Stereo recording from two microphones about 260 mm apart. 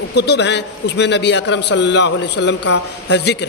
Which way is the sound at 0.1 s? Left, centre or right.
Left.